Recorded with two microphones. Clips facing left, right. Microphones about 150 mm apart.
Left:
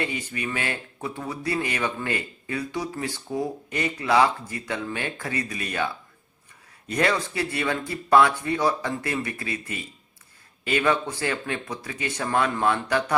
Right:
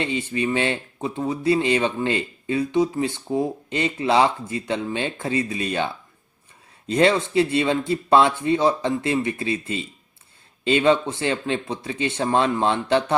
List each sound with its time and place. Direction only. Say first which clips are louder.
0.0 s speech: right 6 dB; 25° right (ahead or behind)